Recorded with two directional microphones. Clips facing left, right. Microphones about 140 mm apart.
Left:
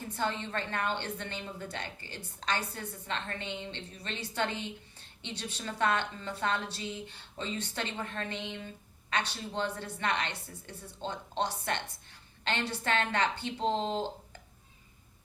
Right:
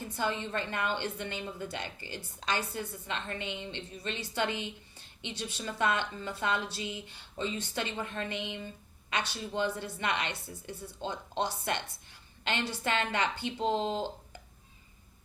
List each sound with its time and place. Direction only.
0.2 s a woman's voice: 10° right (ahead or behind)